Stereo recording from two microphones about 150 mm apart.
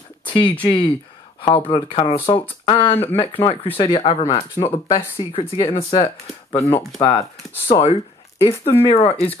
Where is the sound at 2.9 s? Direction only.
15° left (ahead or behind).